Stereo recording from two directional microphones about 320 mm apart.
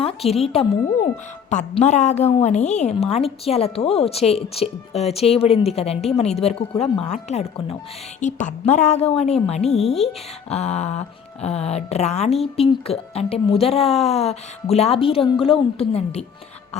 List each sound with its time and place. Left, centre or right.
0.0 s a woman's voice: centre